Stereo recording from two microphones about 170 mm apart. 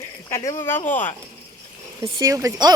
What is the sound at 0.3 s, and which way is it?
Speech, 15° left (ahead or behind).